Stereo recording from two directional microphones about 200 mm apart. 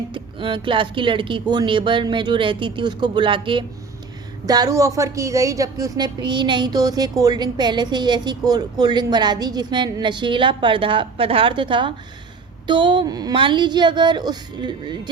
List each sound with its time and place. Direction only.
0.1 s a woman's voice: 25° right (ahead or behind)